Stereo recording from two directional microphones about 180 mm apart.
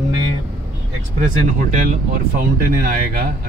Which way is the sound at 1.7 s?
55° right (ahead or behind).